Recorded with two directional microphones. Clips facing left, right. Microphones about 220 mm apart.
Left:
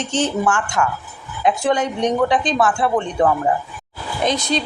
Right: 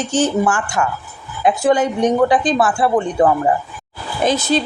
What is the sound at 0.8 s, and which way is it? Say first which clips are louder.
Speech: right 1 dB; 20° right (ahead or behind).